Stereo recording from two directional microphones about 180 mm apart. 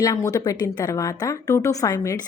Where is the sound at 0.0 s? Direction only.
20° left (ahead or behind).